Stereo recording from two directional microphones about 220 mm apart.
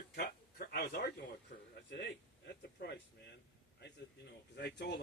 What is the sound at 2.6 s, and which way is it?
Speech, 50° left (ahead or behind).